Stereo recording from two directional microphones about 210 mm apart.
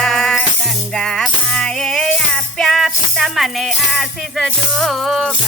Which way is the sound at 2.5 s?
Centre (ahead or behind).